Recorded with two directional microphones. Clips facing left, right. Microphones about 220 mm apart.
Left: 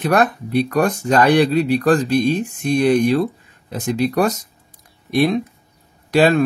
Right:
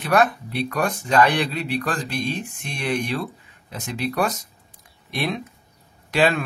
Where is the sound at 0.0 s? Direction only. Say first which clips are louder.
Left 3 dB; 40° left (ahead or behind).